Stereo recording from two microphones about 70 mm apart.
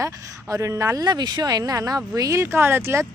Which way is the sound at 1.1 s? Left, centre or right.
Right.